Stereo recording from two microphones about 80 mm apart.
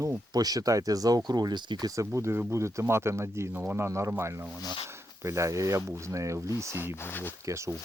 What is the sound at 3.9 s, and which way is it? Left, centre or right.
Speech, right.